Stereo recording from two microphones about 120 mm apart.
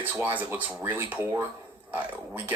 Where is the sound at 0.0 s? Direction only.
15° right (ahead or behind).